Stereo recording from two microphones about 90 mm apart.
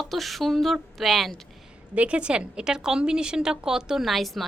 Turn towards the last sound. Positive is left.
turn(degrees=0)  # may be behind; listen again after turning